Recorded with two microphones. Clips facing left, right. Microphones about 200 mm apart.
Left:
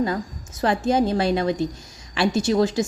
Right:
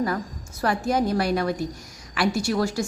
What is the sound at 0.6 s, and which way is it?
A woman's voice, 25° left (ahead or behind).